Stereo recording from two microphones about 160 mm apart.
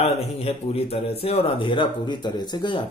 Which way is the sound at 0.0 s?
40° left (ahead or behind).